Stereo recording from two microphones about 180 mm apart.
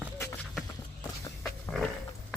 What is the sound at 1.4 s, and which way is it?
Pig, centre (ahead or behind).